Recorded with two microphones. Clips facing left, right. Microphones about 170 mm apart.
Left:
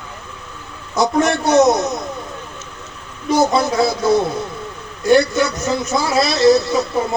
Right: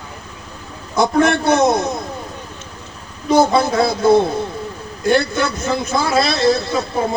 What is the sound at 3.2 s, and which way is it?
A man's voice, 55° right (ahead or behind).